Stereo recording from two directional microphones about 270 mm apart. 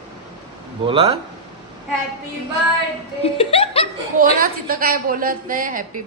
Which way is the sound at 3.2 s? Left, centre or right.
Left.